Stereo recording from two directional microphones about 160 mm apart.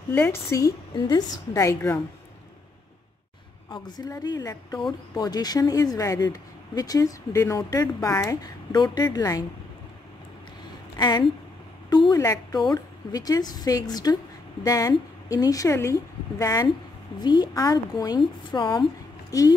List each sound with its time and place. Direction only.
0.1 s speech: 15° left (ahead or behind)
3.7 s speech: 25° left (ahead or behind)
11.0 s speech: 25° left (ahead or behind)